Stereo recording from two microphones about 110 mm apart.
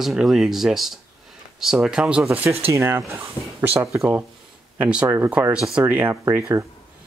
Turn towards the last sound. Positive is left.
turn(degrees=-20)  # may be behind; listen again after turning